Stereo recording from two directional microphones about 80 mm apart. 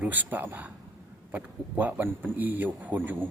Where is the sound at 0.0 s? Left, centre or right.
Right.